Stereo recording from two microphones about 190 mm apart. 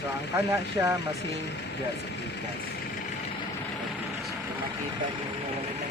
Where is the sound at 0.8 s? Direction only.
15° right (ahead or behind).